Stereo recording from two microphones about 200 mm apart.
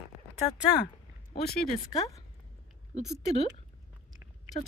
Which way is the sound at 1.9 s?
15° left (ahead or behind).